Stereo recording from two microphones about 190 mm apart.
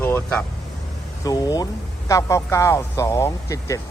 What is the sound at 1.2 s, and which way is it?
Speech, 20° left (ahead or behind).